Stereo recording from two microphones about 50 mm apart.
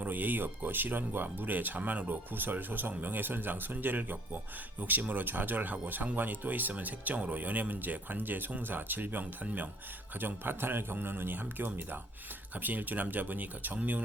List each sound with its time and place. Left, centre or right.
0.0 s a man's voice: right